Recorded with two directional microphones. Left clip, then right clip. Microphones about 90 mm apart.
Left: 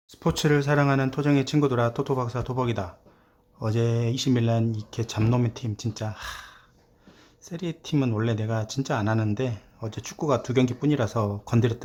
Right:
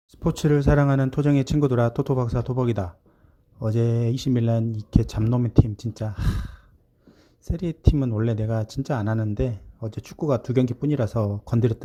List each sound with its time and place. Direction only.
0.1 s speech: 55° right (ahead or behind)
3.6 s speech: 45° right (ahead or behind)